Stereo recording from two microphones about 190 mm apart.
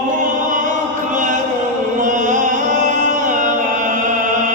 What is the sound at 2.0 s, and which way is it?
Music, 40° right (ahead or behind).